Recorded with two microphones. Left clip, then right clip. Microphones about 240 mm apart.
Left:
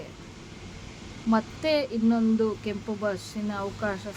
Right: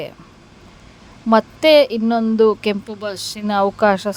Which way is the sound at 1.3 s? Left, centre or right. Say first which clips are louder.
Right 14 dB; right.